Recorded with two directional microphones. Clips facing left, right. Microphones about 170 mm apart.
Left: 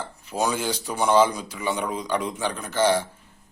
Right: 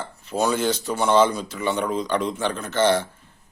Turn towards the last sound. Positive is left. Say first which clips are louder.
# right 2 dB
turn(degrees=10)  # may be behind; listen again after turning